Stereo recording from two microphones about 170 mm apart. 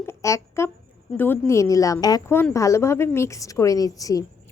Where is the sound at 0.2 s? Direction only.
15° left (ahead or behind).